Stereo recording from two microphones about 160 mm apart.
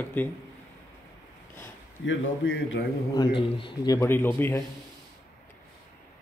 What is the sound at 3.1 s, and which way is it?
A man's voice, 30° left (ahead or behind).